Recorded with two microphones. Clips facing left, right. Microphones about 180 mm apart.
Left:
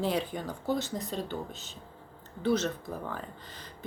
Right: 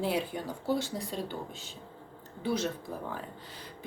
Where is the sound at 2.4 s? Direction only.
10° right (ahead or behind).